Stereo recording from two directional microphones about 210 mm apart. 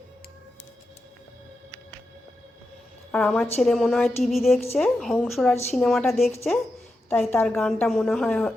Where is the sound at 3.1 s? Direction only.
5° left (ahead or behind).